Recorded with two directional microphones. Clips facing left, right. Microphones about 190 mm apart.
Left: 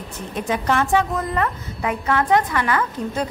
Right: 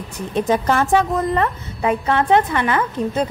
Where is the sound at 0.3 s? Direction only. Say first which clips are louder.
Right 4 dB; 35° right (ahead or behind).